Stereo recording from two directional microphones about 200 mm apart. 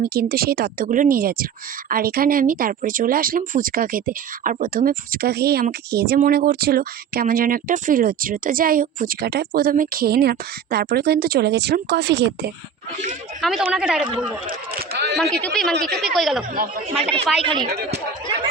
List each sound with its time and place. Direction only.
0.0 s speech: 50° right (ahead or behind)
13.4 s a woman's voice: 5° right (ahead or behind)
14.4 s speech: 50° right (ahead or behind)
15.2 s a woman's voice: 5° left (ahead or behind)
17.4 s speech: 25° right (ahead or behind)
17.7 s speech: 55° right (ahead or behind)